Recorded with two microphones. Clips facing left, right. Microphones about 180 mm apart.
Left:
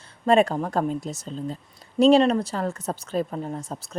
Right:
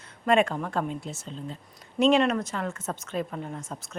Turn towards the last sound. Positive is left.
turn(degrees=35)  # may be behind; listen again after turning